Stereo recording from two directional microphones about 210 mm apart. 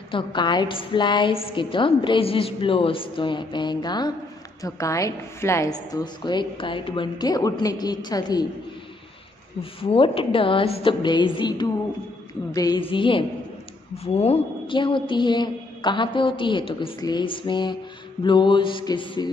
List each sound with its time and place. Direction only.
0.1 s a woman's voice: 20° left (ahead or behind)
9.6 s a woman's voice: 25° left (ahead or behind)